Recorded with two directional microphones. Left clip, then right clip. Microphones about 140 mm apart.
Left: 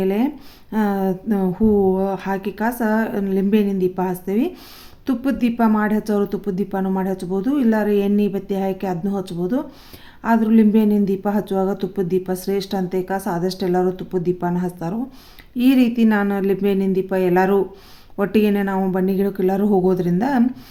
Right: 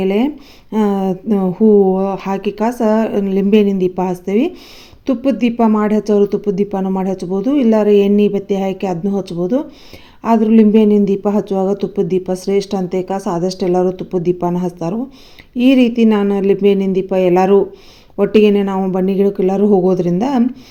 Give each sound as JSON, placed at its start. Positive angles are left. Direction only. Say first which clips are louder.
{"t": 0.0, "sound": "speech", "louder": "right 5 dB", "side_deg": -20}